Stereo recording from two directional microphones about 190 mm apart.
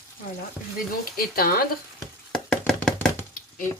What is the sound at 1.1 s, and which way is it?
Speech, 50° left (ahead or behind).